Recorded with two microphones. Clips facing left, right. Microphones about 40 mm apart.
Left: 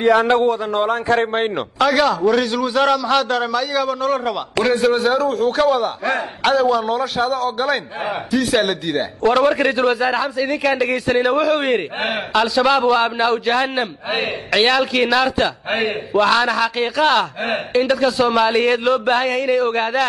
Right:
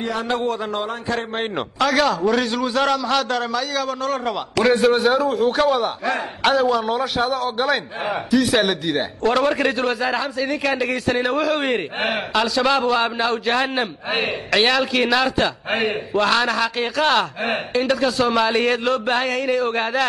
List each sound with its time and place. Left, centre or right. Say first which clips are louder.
0.0 s a sound: left 11 dB; left
0.8 s a man's voice: left 7 dB; left
1.4 s a man's voice: left 3 dB; centre